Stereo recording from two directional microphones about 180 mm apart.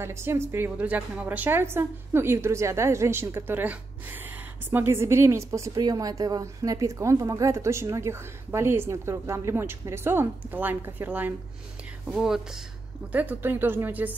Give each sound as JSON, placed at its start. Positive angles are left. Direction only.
{"t": 0.0, "sound": "a woman's voice", "side_deg": -15}